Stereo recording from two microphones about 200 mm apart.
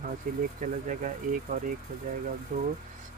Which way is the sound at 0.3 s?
45° right (ahead or behind).